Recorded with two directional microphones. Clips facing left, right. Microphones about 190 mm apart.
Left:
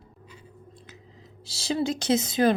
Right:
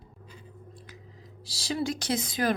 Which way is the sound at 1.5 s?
25° left (ahead or behind).